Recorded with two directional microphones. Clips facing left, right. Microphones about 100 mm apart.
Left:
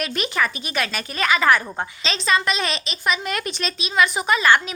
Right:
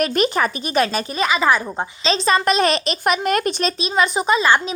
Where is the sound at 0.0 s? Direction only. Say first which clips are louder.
Right 6 dB; 45° right (ahead or behind).